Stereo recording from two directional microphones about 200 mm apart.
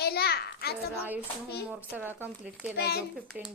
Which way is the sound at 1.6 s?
10° right (ahead or behind).